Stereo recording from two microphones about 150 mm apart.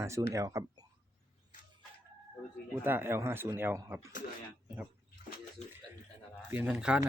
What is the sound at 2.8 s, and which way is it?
Speech, 15° right (ahead or behind).